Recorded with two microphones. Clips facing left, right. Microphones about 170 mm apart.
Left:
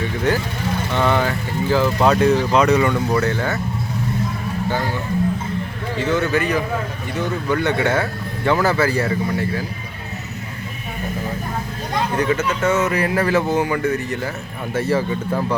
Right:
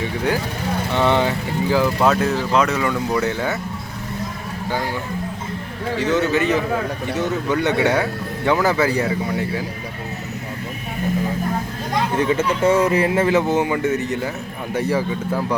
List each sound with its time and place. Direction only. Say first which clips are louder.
0.9 s speech: right 1 dB; 20° right (ahead or behind)
2.0 s speech: left 3 dB; centre (ahead or behind)
3.2 s speech: left 1 dB; 15° right (ahead or behind)
6.0 s speech: even; 20° right (ahead or behind)
12.1 s speech: right 1 dB; 25° right (ahead or behind)
15.3 s speech: left 1 dB; 5° right (ahead or behind)